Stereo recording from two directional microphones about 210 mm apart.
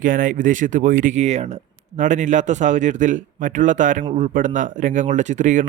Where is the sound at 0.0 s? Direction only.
40° right (ahead or behind).